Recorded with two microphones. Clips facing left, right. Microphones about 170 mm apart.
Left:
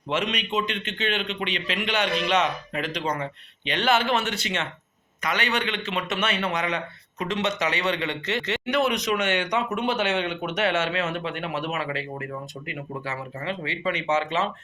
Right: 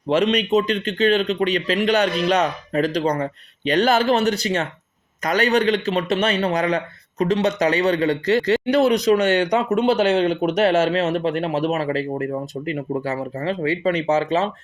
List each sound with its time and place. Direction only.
0.1 s a man's voice: 35° right (ahead or behind)